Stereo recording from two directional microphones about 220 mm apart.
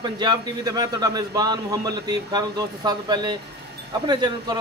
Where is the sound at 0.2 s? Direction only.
20° right (ahead or behind).